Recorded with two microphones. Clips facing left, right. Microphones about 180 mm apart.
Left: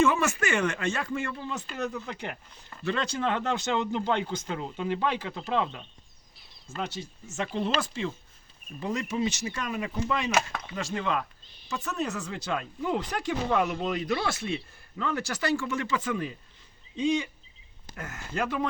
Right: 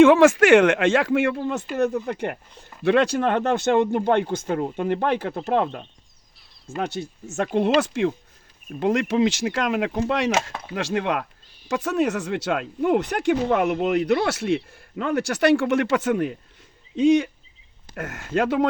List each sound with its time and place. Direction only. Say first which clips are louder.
0.0 s speech: right 12 dB; 90° right
1.4 s speech: right 10 dB; 55° right (ahead or behind)
7.0 s speech: right 7 dB; 55° right (ahead or behind)
8.8 s a man's voice: right 9 dB; 90° right; by 11.3 s 65° right (ahead or behind)
11.7 s a man's voice: right 10 dB; 90° right; by 16.3 s 65° right (ahead or behind)
17.0 s speech: right 9 dB; 85° right
17.9 s a man's voice: right 9 dB; 70° right (ahead or behind)